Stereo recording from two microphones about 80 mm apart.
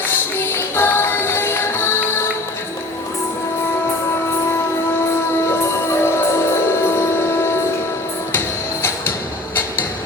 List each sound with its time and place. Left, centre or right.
0.3 s music: left
5.5 s music: left